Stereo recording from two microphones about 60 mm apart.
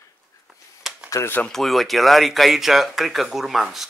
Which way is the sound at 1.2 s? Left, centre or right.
Left.